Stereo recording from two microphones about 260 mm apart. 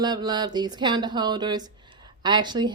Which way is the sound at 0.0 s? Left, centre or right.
Centre.